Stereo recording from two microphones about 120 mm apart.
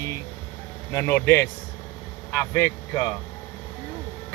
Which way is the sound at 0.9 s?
20° left (ahead or behind).